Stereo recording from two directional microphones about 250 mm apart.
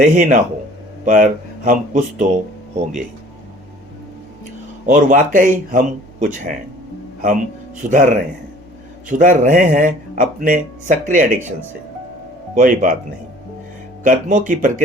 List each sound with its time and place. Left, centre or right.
0.0 s speech: right
4.9 s speech: right
7.9 s speech: right
12.5 s speech: right
14.0 s speech: right